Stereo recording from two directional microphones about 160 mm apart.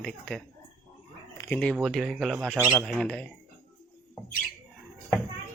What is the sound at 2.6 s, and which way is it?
Speech, 15° right (ahead or behind).